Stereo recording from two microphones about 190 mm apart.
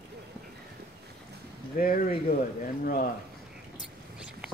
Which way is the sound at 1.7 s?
45° left (ahead or behind).